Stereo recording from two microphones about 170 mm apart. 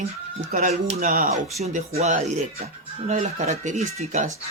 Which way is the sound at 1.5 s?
40° right (ahead or behind).